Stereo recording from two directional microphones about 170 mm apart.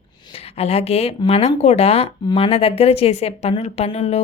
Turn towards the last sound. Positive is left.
turn(degrees=40)  # may be behind; listen again after turning